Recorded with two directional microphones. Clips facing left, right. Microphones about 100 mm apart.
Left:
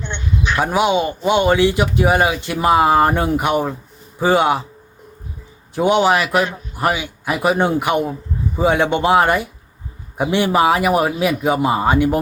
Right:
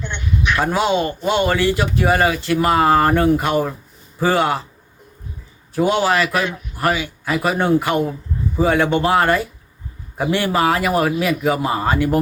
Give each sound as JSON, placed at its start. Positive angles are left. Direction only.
{"t": 0.0, "sound": "a sound", "side_deg": 25}
{"t": 0.6, "sound": "speech", "side_deg": 15}
{"t": 5.7, "sound": "speech", "side_deg": 20}